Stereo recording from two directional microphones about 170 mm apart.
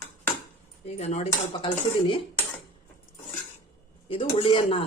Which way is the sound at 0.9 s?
40° left (ahead or behind).